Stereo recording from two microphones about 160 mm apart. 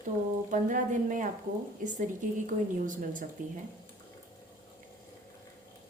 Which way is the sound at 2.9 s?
55° right (ahead or behind).